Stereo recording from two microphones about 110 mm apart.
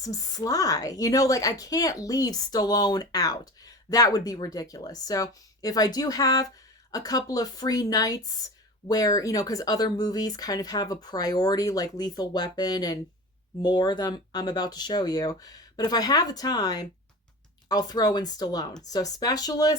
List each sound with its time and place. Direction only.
0.0 s a woman's voice: 35° left (ahead or behind)